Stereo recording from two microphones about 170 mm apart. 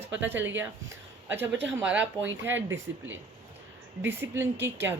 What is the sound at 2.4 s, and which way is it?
Speech, 10° right (ahead or behind).